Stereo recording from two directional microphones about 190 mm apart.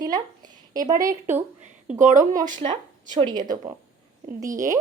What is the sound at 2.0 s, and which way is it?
Speech, 40° right (ahead or behind).